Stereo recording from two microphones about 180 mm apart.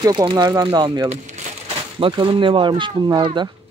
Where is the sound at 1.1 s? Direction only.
35° right (ahead or behind).